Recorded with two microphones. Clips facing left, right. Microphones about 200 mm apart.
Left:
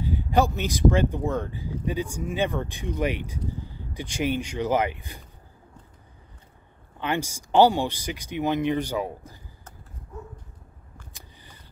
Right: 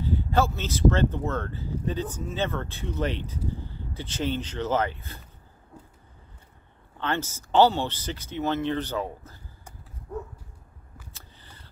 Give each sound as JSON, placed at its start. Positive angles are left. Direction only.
{"t": 0.0, "sound": "speech", "side_deg": 15}
{"t": 7.0, "sound": "speech", "side_deg": 15}
{"t": 10.1, "sound": "dog", "side_deg": -60}
{"t": 11.1, "sound": "a sound", "side_deg": 10}